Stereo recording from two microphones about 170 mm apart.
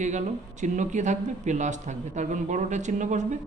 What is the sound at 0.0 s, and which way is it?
Speech, 45° right (ahead or behind).